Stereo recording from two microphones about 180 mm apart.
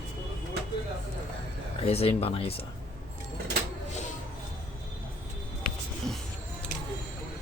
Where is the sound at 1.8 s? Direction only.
35° left (ahead or behind).